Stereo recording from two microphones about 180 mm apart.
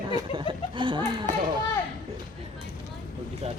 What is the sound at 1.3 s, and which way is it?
Speech, 45° right (ahead or behind).